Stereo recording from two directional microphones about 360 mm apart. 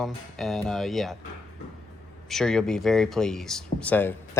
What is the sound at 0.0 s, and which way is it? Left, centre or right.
Speech, centre.